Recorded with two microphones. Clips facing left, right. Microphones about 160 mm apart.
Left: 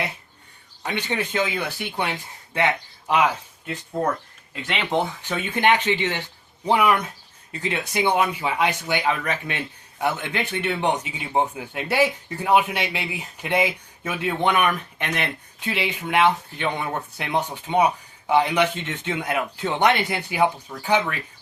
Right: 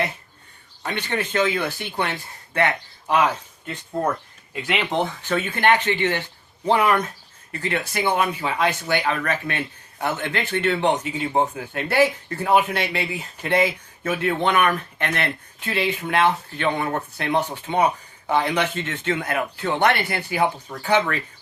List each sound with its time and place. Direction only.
0.8 s speech: 15° left (ahead or behind)
4.9 s speech: 15° left (ahead or behind)